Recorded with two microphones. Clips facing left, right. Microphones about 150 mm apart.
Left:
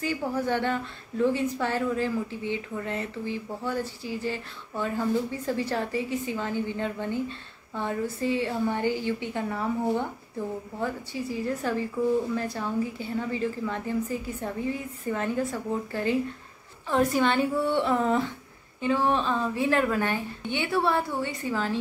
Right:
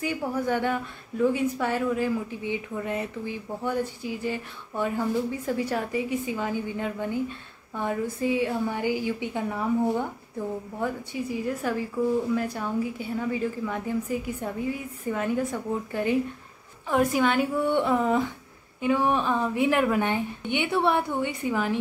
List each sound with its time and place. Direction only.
0.0 s a woman's voice: 10° right (ahead or behind)